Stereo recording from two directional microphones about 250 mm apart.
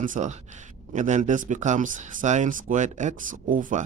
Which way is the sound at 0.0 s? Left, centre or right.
Right.